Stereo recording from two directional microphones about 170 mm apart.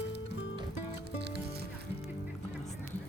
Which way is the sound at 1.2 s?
80° right.